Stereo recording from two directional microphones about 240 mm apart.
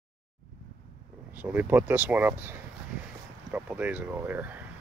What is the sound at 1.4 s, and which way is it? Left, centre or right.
Speech, centre.